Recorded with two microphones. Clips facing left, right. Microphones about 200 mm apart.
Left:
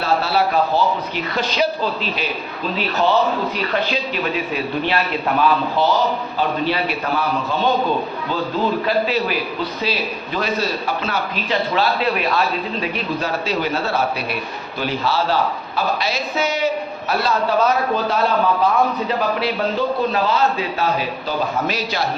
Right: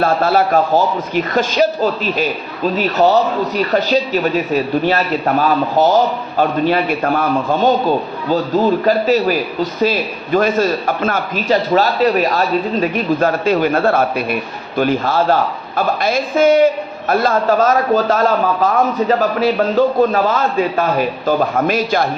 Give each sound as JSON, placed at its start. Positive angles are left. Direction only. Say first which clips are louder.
{"t": 0.0, "sound": "a man's voice", "louder": "right 5 dB", "side_deg": -50}